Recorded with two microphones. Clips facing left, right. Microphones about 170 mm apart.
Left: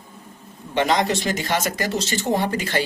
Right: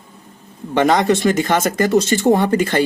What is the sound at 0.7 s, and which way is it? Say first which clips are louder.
A man's voice: right 6 dB; 50° right (ahead or behind).